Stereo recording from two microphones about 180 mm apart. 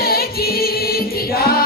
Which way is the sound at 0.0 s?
60° left (ahead or behind).